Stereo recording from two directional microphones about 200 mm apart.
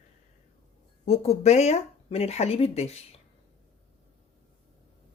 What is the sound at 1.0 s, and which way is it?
A woman's voice, 30° left (ahead or behind).